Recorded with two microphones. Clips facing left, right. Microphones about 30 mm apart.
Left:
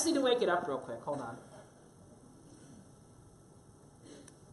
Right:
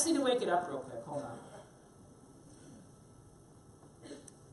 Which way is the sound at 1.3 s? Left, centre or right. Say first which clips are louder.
Right 2 dB; centre.